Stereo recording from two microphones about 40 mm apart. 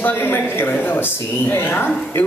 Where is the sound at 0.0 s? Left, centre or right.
Left.